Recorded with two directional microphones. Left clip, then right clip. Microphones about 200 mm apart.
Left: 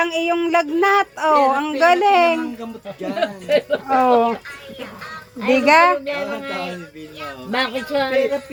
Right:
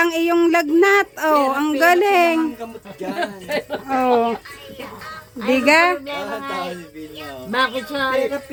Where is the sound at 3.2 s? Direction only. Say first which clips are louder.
Left 6 dB; 35° right (ahead or behind).